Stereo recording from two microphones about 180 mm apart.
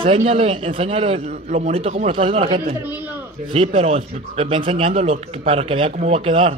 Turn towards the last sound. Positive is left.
turn(degrees=-30)  # may be behind; listen again after turning